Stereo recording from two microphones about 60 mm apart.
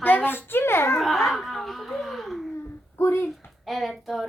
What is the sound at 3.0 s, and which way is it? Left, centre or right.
Speech, left.